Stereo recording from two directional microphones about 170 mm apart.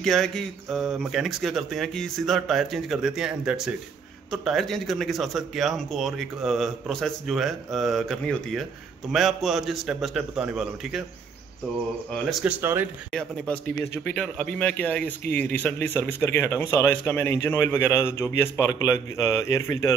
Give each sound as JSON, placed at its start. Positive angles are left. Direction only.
{"t": 0.0, "sound": "a man's voice", "side_deg": 0}
{"t": 12.1, "sound": "speech", "side_deg": 0}
{"t": 14.0, "sound": "a man's voice", "side_deg": 5}